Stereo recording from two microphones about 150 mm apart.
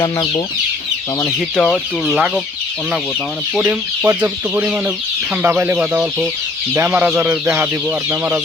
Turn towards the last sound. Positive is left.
turn(degrees=-10)  # may be behind; listen again after turning